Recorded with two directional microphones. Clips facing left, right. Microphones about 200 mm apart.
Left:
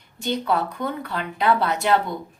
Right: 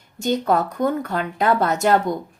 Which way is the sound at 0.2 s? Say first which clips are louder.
Right 4 dB; 45° right (ahead or behind).